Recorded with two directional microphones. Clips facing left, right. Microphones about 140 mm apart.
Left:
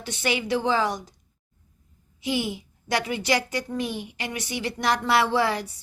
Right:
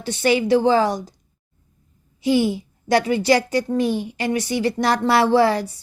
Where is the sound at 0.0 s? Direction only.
35° right (ahead or behind).